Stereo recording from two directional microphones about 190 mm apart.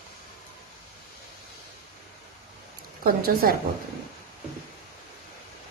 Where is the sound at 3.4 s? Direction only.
45° right (ahead or behind).